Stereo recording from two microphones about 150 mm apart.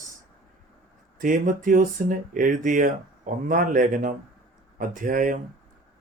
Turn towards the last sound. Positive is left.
turn(degrees=-65)  # may be behind; listen again after turning